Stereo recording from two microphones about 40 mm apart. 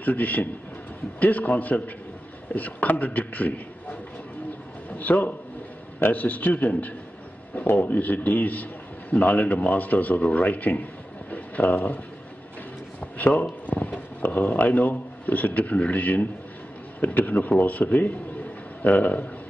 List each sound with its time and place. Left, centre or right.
0.0 s a man's voice: left
4.9 s a man's voice: left
13.0 s a sound: left
14.2 s a man's voice: left